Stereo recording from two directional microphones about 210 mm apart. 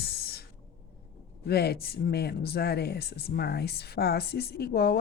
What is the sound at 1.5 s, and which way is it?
Speech, 50° left (ahead or behind).